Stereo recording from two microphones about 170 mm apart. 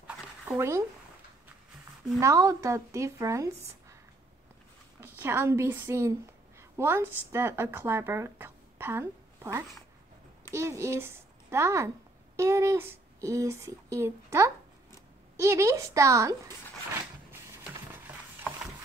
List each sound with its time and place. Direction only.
0.0 s a sound: 10° right (ahead or behind)
2.1 s speech: 20° right (ahead or behind)
5.0 s a woman's voice: 15° right (ahead or behind)